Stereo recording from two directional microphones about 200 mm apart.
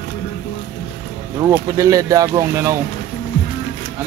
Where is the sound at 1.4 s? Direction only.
15° right (ahead or behind).